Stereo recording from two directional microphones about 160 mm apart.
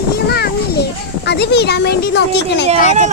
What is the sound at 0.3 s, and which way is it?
Children playing, 80° left.